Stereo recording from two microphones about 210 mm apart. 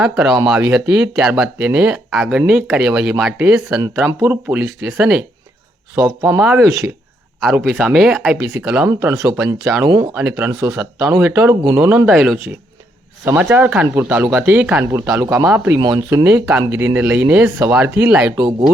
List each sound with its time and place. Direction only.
0.0 s speech: 5° right (ahead or behind)
3.8 s speech: 15° right (ahead or behind)
6.0 s speech: 15° right (ahead or behind)
18.3 s speech: 20° right (ahead or behind)